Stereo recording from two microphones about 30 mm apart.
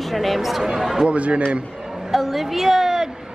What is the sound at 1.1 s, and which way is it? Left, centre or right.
Speech, right.